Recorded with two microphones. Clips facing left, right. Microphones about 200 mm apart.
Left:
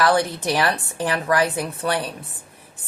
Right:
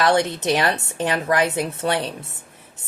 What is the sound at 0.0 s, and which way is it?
Speech, 25° right (ahead or behind).